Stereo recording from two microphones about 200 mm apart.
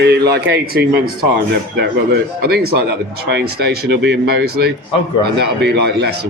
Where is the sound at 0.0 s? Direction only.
55° right (ahead or behind).